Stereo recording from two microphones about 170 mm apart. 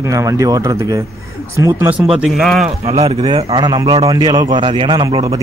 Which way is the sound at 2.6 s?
40° right (ahead or behind).